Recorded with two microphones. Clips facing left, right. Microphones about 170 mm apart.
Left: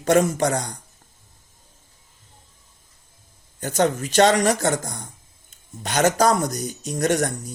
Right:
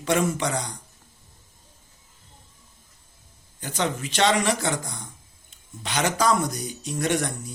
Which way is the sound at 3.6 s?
45° left (ahead or behind).